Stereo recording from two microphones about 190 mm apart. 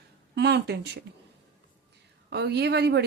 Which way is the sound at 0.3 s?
65° right (ahead or behind).